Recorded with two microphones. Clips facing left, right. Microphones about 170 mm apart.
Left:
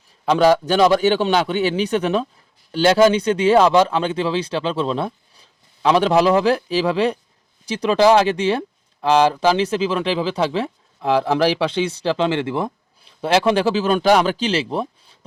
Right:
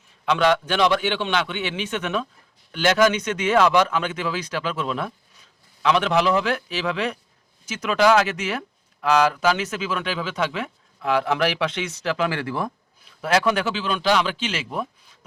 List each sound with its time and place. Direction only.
0.3 s speech: 35° left (ahead or behind)